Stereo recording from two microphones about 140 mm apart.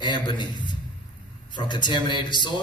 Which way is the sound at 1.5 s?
35° left (ahead or behind).